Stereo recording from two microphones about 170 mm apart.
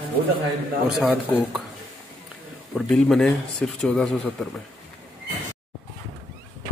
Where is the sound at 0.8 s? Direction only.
5° right (ahead or behind).